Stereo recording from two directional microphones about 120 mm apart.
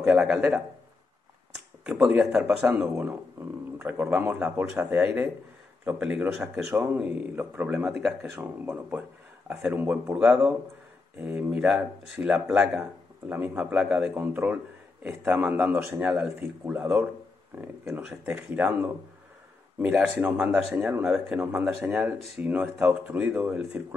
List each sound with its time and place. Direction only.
0.0 s speech: 5° right (ahead or behind)
1.5 s a sound: 10° right (ahead or behind)
2.3 s speech: 10° right (ahead or behind)
3.7 s speech: 15° right (ahead or behind)
9.5 s speech: 5° right (ahead or behind)
21.5 s speech: 20° right (ahead or behind)
21.9 s speech: 10° right (ahead or behind)